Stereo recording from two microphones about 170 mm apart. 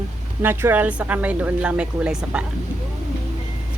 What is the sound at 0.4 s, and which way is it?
Speech, 10° right (ahead or behind).